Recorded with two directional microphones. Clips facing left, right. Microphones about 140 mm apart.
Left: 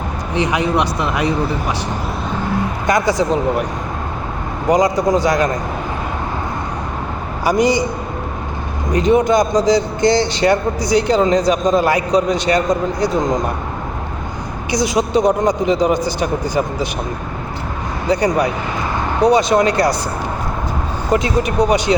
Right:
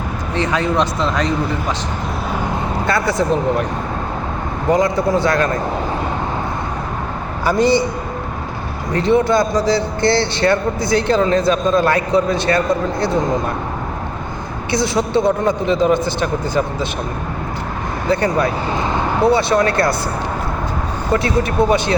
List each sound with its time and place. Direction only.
0.3 s speech: 15° left (ahead or behind)
2.8 s speech: 15° left (ahead or behind)
4.7 s speech: 15° left (ahead or behind)
7.4 s speech: 15° left (ahead or behind)
8.9 s speech: 15° left (ahead or behind)
14.7 s speech: 15° left (ahead or behind)
18.1 s speech: 15° left (ahead or behind)
21.1 s speech: 15° left (ahead or behind)